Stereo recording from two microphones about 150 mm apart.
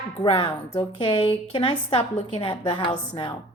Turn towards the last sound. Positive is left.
turn(degrees=35)  # may be behind; listen again after turning